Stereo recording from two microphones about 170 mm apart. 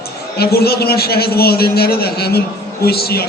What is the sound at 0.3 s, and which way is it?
A man's voice, 65° left (ahead or behind).